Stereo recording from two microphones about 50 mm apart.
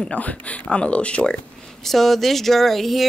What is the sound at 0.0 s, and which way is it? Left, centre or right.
Speech, left.